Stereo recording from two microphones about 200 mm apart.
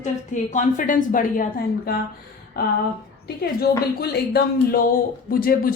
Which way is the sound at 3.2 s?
55° left (ahead or behind).